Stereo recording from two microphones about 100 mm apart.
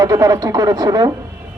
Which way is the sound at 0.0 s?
35° right (ahead or behind).